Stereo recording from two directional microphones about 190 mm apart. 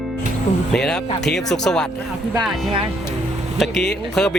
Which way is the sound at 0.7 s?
5° left (ahead or behind).